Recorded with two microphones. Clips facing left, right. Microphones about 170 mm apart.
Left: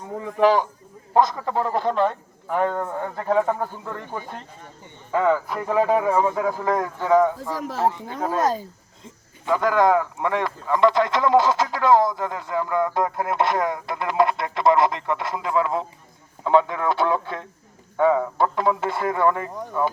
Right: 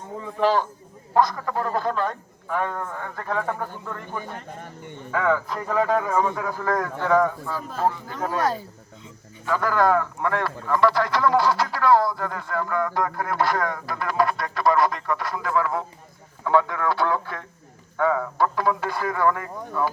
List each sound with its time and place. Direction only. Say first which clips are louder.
0.4 s a man's voice: left 3 dB; 15° left (ahead or behind)
5.1 s a man's voice: left 3 dB; 15° left (ahead or behind)
7.3 s speech: left 3 dB; 80° left
7.9 s a man's voice: even; 25° left (ahead or behind)